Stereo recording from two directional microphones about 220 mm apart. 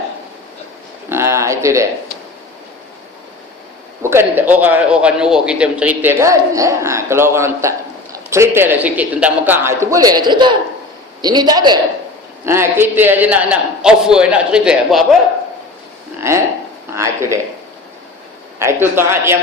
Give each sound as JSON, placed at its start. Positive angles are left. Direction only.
{"t": 1.1, "sound": "speech", "side_deg": -10}
{"t": 4.0, "sound": "a man's voice", "side_deg": -10}
{"t": 16.9, "sound": "a man's voice", "side_deg": -10}
{"t": 18.6, "sound": "a man's voice", "side_deg": -10}